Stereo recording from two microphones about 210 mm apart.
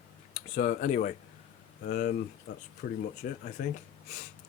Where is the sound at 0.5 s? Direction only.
40° left (ahead or behind).